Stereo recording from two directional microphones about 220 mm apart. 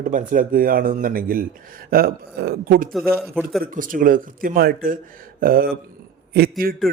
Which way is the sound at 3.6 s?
40° right (ahead or behind).